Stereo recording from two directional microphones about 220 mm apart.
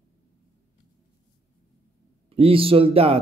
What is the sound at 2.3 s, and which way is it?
Speech, 25° right (ahead or behind).